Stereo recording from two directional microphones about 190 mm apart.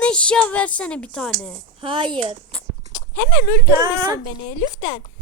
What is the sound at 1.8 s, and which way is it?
Speech, 25° right (ahead or behind).